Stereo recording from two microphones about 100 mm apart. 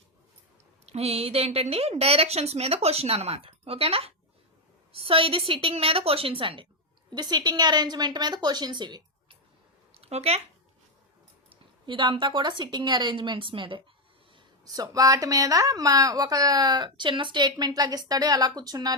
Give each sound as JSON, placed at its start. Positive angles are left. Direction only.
{"t": 0.9, "sound": "a woman's voice", "side_deg": -90}
{"t": 7.1, "sound": "a woman's voice", "side_deg": -45}
{"t": 9.9, "sound": "a sound", "side_deg": -85}
{"t": 11.4, "sound": "a woman's voice", "side_deg": -55}
{"t": 14.6, "sound": "a woman's voice", "side_deg": -40}